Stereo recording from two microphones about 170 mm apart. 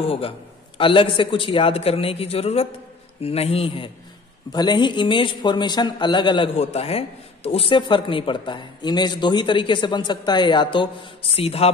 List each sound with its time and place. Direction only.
0.0 s a man's voice: 35° left (ahead or behind)